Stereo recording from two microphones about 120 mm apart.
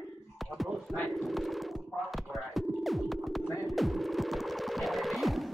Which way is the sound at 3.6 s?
Centre (ahead or behind).